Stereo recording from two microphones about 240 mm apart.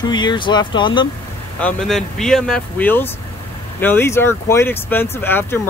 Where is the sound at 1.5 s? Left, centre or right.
Centre.